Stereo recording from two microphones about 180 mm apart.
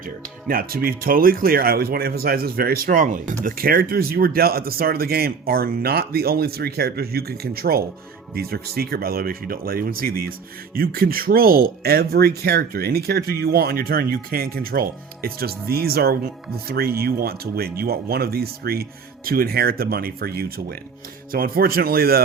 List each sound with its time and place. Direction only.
0.4 s speech: 55° right (ahead or behind)